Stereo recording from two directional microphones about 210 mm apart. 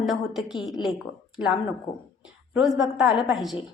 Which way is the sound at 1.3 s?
5° right (ahead or behind).